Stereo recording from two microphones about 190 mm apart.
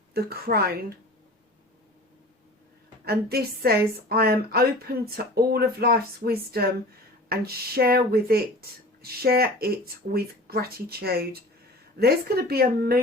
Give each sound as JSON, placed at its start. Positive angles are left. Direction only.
{"t": 0.1, "sound": "speech", "side_deg": -55}
{"t": 3.0, "sound": "speech", "side_deg": -55}